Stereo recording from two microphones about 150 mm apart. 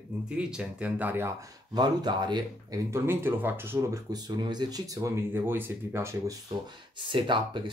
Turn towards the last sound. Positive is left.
turn(degrees=-30)  # may be behind; listen again after turning